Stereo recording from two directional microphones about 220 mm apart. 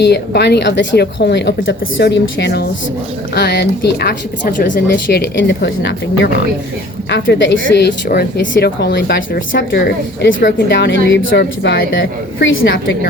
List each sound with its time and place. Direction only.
0.0 s a woman's voice: 50° left (ahead or behind)